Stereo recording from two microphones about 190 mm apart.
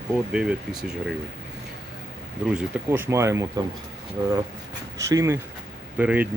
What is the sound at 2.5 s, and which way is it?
Speech, 5° right (ahead or behind).